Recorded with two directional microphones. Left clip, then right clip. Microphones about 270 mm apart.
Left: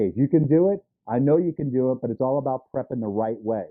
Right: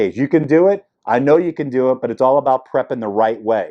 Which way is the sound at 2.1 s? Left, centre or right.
Right.